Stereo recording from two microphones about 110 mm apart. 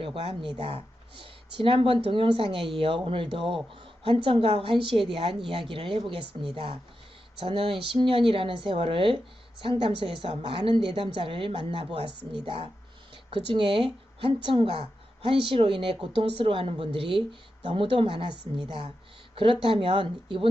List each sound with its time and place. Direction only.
0.0 s a woman's voice: 65° right (ahead or behind)
13.5 s a woman's voice: 55° right (ahead or behind)